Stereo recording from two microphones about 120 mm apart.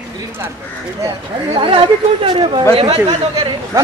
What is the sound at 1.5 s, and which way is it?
Speech, 45° right (ahead or behind).